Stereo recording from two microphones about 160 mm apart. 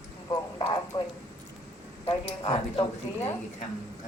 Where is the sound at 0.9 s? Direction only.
25° left (ahead or behind).